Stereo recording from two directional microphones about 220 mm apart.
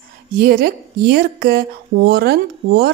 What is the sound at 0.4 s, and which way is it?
A woman's voice, 45° right (ahead or behind).